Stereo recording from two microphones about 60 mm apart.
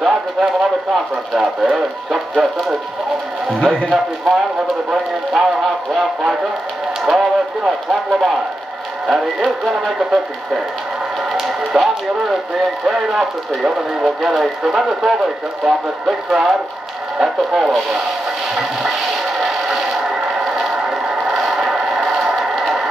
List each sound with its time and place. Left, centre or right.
0.0 s a sound: centre
1.3 s speech: centre
3.5 s speech: centre
3.9 s speech: centre
18.5 s a sound: centre
19.4 s scrape: centre